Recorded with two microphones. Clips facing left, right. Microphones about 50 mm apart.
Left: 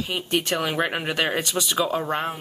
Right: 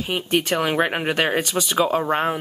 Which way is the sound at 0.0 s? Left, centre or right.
Right.